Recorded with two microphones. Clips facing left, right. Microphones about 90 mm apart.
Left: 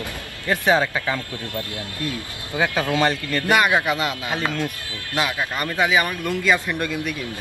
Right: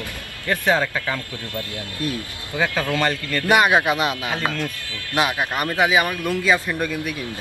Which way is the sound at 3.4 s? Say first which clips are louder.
Right 2 dB; 20° right (ahead or behind).